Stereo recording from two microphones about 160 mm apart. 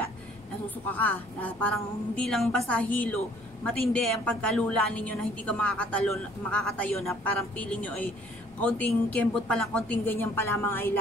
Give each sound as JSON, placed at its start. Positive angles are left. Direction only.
{"t": 0.8, "sound": "a woman's voice", "side_deg": 10}